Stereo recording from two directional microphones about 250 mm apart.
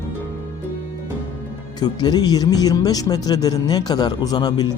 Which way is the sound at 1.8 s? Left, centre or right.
Centre.